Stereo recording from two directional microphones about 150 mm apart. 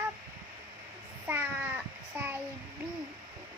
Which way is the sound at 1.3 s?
10° right (ahead or behind).